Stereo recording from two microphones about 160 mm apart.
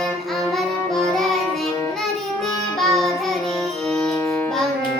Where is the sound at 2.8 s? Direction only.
Centre (ahead or behind).